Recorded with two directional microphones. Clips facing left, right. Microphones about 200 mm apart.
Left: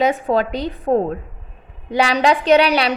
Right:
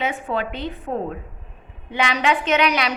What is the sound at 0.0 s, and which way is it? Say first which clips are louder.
A woman's voice: left 7 dB; 40° left (ahead or behind).